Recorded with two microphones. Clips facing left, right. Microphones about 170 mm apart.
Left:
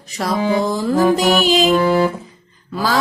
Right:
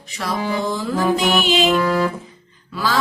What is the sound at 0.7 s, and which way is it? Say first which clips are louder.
Music: left 3 dB; 40° left (ahead or behind).